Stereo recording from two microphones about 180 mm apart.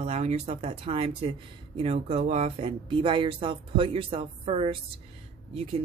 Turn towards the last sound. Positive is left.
turn(degrees=-35)  # may be behind; listen again after turning